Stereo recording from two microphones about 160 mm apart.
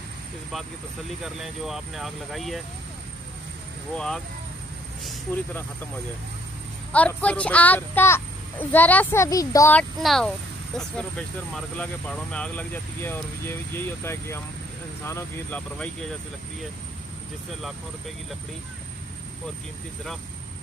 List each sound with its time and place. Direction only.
1.2 s speech: centre (ahead or behind)
3.9 s speech: 5° left (ahead or behind)
6.9 s speech: 10° left (ahead or behind)
9.8 s speech: 5° left (ahead or behind)